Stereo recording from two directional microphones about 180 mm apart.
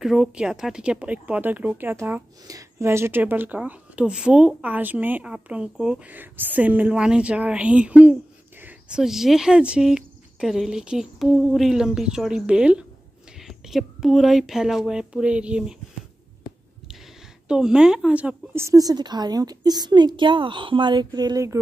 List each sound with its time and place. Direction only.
0.0 s speech: centre (ahead or behind)
17.5 s a woman's voice: 5° right (ahead or behind); by 21.5 s 20° right (ahead or behind)